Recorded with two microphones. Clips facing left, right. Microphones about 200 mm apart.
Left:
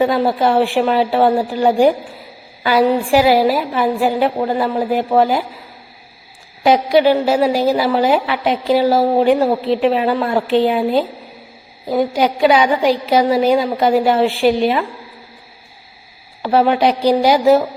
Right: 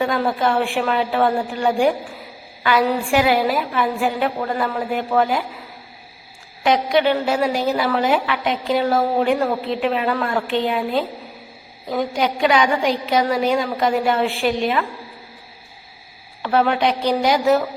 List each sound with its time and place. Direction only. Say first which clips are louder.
0.0 s a woman's voice: left 5 dB; 30° left (ahead or behind)
6.6 s a woman's voice: left 5 dB; 35° left (ahead or behind)
16.4 s a woman's voice: left 4 dB; 35° left (ahead or behind)